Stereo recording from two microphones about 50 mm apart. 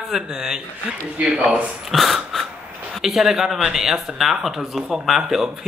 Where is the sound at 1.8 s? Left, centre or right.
Centre.